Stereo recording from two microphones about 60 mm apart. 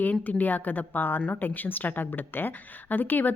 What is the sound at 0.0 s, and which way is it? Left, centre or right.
A woman's voice, left.